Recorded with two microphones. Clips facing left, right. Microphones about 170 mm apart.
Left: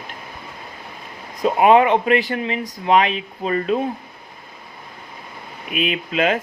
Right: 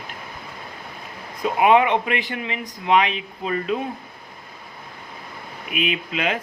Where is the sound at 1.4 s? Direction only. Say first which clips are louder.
Left 3 dB; 40° left (ahead or behind).